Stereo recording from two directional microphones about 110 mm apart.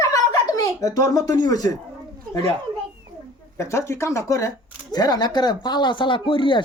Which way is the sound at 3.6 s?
25° left (ahead or behind).